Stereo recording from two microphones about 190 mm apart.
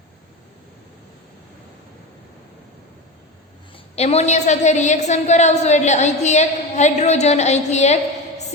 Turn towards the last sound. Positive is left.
turn(degrees=35)  # may be behind; listen again after turning